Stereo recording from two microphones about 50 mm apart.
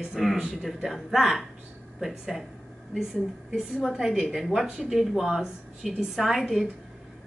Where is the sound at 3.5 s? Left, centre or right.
Centre.